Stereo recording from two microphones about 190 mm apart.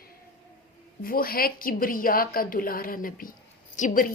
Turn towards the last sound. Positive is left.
turn(degrees=45)  # may be behind; listen again after turning